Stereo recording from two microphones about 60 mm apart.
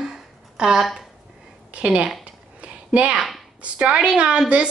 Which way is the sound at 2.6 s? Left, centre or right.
Right.